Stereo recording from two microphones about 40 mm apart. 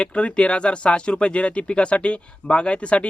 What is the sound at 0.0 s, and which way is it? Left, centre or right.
Speech, left.